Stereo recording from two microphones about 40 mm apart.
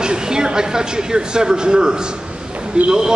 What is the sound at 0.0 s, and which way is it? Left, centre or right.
Speech, centre.